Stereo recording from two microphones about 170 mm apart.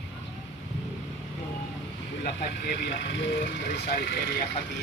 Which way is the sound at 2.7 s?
85° left.